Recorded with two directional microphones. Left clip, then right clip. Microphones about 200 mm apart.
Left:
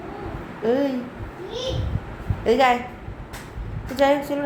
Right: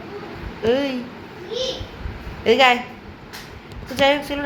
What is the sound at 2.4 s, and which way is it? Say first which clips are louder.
Speech: right 3 dB; centre (ahead or behind).